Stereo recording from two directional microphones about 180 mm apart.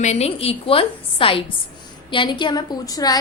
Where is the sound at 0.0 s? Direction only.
35° left (ahead or behind).